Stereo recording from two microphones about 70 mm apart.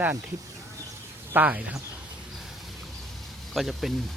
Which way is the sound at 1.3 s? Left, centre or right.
Right.